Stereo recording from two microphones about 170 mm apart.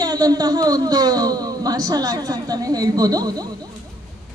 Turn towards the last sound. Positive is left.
turn(degrees=-20)  # may be behind; listen again after turning